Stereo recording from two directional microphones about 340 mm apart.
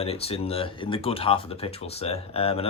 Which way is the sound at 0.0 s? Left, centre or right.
Centre.